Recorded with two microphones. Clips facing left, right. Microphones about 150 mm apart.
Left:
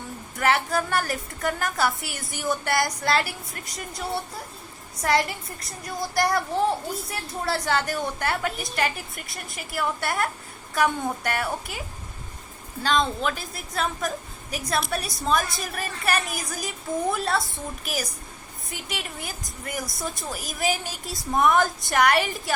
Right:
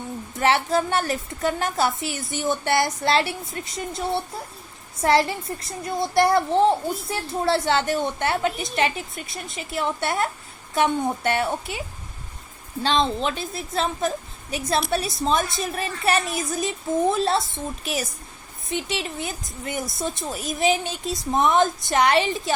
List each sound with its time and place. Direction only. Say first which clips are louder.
0.3 s a child's voice: right 3 dB; 25° right (ahead or behind)
12.8 s a child's voice: right 2 dB; 30° right (ahead or behind)
18.7 s a child's voice: right 8 dB; 25° right (ahead or behind)